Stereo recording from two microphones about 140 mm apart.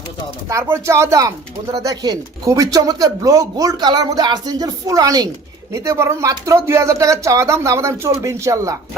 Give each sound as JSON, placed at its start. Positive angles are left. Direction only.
{"t": 0.4, "sound": "speech", "side_deg": -20}